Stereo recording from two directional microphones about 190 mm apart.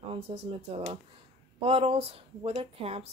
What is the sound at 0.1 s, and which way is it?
A woman's voice, 30° right (ahead or behind).